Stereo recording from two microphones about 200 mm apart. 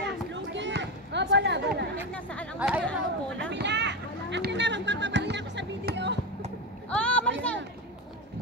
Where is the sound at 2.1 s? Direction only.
5° left (ahead or behind).